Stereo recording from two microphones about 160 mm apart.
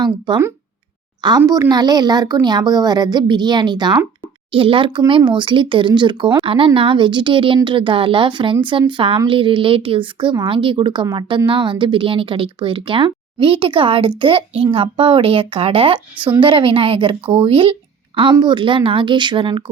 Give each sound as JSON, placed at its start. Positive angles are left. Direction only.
{"t": 1.4, "sound": "a woman's voice", "side_deg": -25}